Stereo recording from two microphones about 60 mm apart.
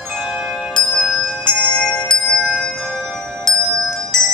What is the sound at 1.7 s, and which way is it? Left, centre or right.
Music, centre.